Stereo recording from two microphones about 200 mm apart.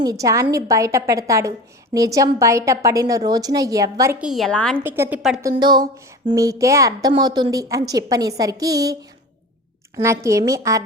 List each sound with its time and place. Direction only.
0.0 s a woman's voice: 20° right (ahead or behind)
4.3 s a woman's voice: centre (ahead or behind)
4.8 s a woman's voice: 10° right (ahead or behind)
5.4 s a woman's voice: 20° right (ahead or behind)
10.0 s a woman's voice: 15° right (ahead or behind)